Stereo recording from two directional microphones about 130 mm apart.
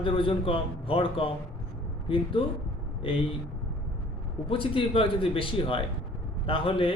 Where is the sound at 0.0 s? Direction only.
45° left (ahead or behind).